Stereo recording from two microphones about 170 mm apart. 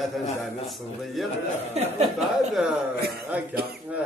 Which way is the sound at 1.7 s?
40° right (ahead or behind).